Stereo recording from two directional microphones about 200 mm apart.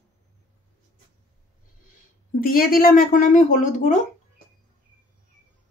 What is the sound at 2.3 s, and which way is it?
Speech, 45° left (ahead or behind).